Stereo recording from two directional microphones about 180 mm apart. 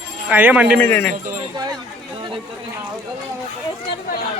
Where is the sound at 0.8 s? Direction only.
10° left (ahead or behind).